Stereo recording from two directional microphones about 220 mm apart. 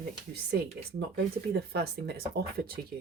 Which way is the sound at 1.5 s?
45° right (ahead or behind).